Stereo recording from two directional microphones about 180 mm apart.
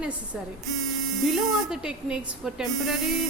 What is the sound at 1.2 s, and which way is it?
Speech, centre (ahead or behind).